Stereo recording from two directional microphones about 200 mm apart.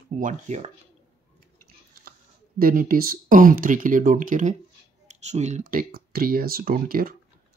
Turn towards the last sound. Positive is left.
turn(degrees=-45)  # may be behind; listen again after turning